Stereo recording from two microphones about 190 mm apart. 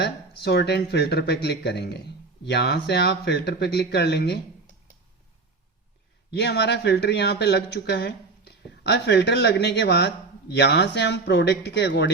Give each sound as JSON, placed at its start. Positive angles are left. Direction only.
{"t": 0.0, "sound": "speech", "side_deg": 60}
{"t": 6.3, "sound": "speech", "side_deg": 60}